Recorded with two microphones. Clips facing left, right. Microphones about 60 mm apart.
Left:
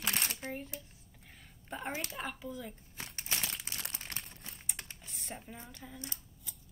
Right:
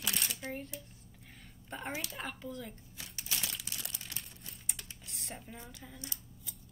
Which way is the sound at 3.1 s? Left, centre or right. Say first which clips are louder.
Left 1 dB; left.